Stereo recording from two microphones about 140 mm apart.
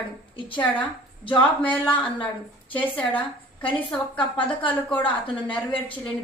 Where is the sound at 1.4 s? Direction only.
10° left (ahead or behind).